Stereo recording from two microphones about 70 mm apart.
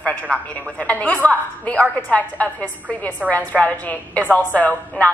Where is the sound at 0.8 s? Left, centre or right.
Centre.